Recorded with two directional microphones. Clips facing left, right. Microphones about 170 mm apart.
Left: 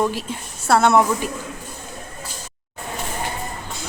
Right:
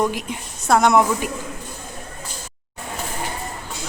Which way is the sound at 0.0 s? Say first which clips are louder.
Even; 15° right (ahead or behind).